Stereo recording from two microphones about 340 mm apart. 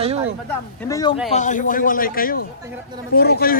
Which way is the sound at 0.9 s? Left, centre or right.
Centre.